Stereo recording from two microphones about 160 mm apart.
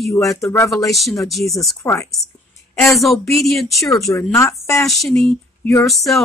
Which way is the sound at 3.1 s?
Centre (ahead or behind).